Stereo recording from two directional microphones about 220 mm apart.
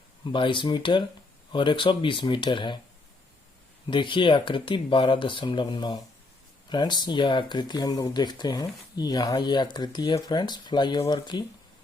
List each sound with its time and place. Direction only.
0.3 s speech: 20° left (ahead or behind)
3.8 s speech: 20° left (ahead or behind)